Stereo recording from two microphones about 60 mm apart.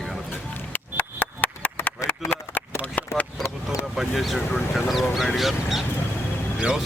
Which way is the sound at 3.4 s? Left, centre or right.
Left.